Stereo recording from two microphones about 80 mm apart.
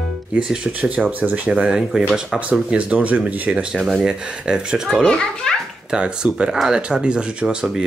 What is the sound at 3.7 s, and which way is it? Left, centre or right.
Speech, centre.